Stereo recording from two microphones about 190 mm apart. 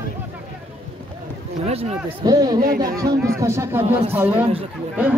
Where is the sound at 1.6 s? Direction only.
30° right (ahead or behind).